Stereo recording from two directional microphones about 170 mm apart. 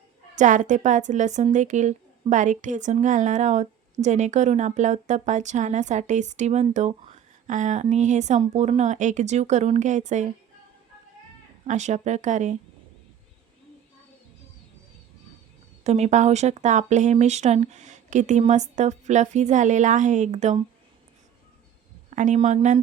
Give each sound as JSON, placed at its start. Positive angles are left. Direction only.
{"t": 0.3, "sound": "speech", "side_deg": -45}
{"t": 11.6, "sound": "speech", "side_deg": -45}
{"t": 15.8, "sound": "speech", "side_deg": -40}
{"t": 22.1, "sound": "speech", "side_deg": -45}